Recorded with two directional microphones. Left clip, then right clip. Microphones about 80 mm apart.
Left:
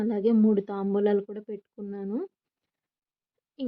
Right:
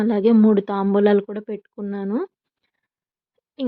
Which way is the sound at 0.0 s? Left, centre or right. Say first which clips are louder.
Right 7 dB; right.